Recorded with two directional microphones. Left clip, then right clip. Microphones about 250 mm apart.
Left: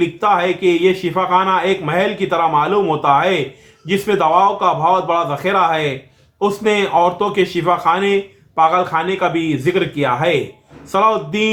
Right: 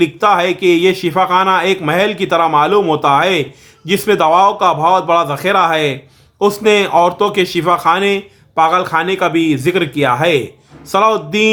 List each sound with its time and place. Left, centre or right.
0.0 s speech: right